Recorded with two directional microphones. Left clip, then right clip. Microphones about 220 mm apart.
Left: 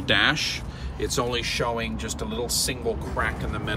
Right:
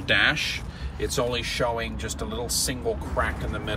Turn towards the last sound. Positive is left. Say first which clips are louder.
# left 1 dB
turn(degrees=-5)  # may be behind; listen again after turning